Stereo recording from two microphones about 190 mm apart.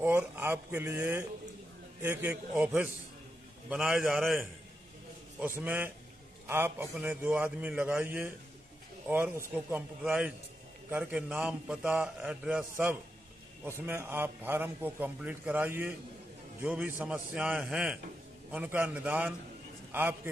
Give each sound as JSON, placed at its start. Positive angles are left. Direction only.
{"t": 0.0, "sound": "a man's voice", "side_deg": -10}